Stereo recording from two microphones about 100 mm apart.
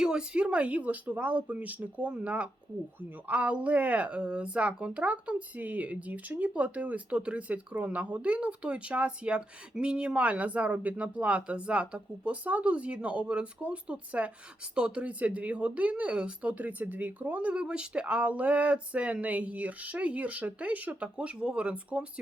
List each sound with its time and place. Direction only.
0.0 s speech: 10° right (ahead or behind)